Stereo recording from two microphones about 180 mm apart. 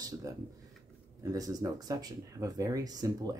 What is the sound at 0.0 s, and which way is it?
Speech, 20° right (ahead or behind).